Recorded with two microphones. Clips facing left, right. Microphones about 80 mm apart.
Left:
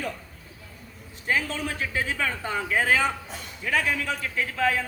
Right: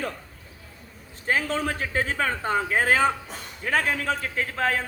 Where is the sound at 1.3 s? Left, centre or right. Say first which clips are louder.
Right 2 dB; right.